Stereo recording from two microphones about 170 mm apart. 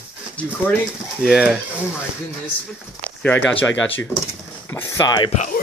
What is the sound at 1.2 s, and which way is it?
Speech, 5° right (ahead or behind).